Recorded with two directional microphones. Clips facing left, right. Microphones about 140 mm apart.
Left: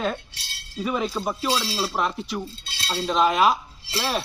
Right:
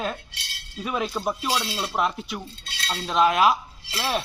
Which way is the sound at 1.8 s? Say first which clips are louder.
Even; centre (ahead or behind).